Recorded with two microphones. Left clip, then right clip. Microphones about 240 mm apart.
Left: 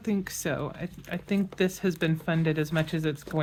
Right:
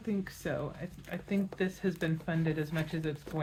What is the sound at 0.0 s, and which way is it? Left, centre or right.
Speech, left.